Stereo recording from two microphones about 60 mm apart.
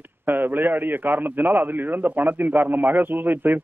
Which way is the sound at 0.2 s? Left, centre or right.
Right.